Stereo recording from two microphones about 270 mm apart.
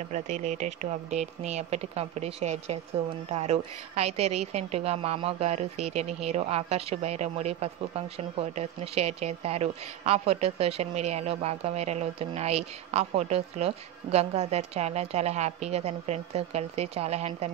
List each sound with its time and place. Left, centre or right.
0.1 s a woman's voice: right